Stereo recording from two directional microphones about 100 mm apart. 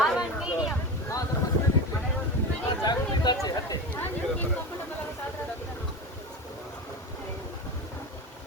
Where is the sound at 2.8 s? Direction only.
45° left (ahead or behind).